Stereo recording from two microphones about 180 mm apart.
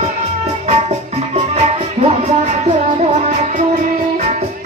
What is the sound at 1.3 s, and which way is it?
Music, 35° right (ahead or behind).